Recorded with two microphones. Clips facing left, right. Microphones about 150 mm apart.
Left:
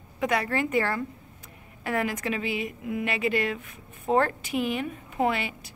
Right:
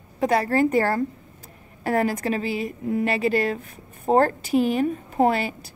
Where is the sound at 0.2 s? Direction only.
35° right (ahead or behind).